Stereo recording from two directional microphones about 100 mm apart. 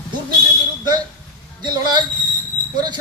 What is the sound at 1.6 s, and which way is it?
Speech, 45° right (ahead or behind).